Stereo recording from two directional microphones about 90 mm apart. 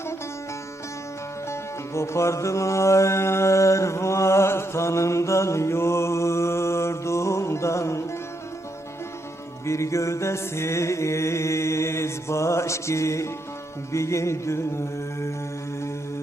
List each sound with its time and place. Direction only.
1.5 s music: 30° left (ahead or behind)
9.6 s music: 35° left (ahead or behind)
13.9 s mantra: 35° left (ahead or behind)